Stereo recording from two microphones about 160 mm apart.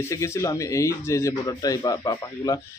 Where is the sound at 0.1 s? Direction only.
20° left (ahead or behind).